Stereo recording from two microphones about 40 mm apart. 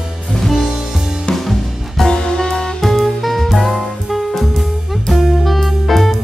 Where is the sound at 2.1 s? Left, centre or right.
Centre.